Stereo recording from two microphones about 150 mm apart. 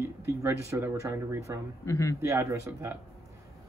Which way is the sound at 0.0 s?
15° right (ahead or behind).